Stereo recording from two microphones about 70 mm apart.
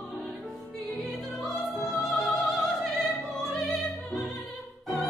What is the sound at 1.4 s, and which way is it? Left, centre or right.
Opera, centre.